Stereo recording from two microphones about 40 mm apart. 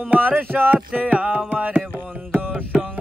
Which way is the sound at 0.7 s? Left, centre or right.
Right.